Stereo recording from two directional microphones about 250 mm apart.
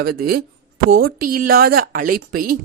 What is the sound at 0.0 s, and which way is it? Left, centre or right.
Speech, right.